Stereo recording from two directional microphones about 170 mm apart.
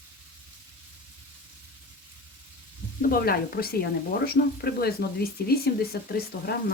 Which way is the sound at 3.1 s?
65° left (ahead or behind).